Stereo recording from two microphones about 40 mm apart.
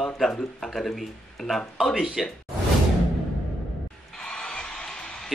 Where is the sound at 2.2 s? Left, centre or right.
Centre.